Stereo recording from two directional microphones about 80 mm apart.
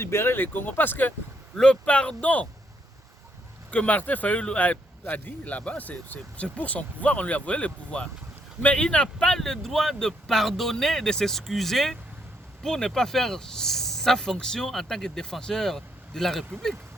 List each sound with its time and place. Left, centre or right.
0.0 s speech: left
1.5 s speech: centre
3.7 s speech: centre